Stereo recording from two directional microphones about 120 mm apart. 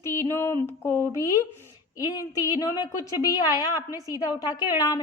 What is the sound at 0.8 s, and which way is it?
A woman's voice, 20° left (ahead or behind).